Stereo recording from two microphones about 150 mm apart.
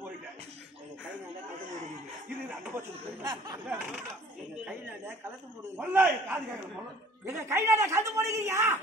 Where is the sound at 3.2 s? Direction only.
25° right (ahead or behind).